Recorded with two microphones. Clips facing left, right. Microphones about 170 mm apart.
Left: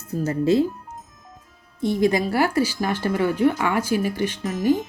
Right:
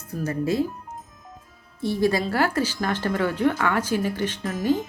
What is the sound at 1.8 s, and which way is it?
Speech, 20° left (ahead or behind).